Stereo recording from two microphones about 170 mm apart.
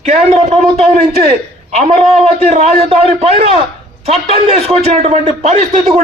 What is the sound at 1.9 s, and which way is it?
A man's voice, 40° right (ahead or behind).